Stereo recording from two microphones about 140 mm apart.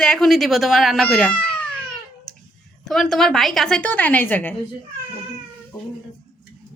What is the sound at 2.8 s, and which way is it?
A woman's voice, 5° left (ahead or behind).